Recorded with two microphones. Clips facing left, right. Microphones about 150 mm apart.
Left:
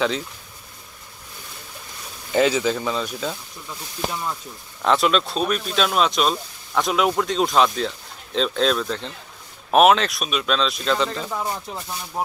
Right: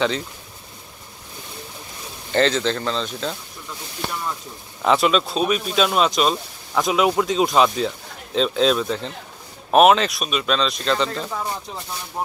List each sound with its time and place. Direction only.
2.3 s speech: 10° left (ahead or behind)